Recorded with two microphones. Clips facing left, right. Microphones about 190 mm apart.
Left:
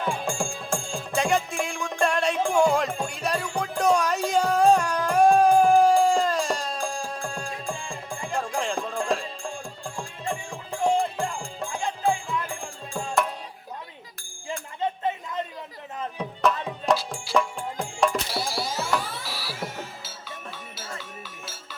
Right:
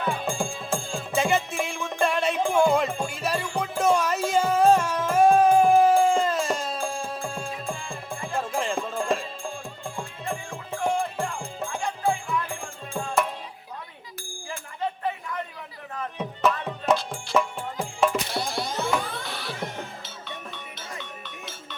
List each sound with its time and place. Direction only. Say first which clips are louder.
0.0 s music: even; centre (ahead or behind)
14.8 s a sound: left 1 dB; 20° left (ahead or behind)
16.5 s music: even; centre (ahead or behind)
21.0 s cowbell: right 1 dB; 5° left (ahead or behind)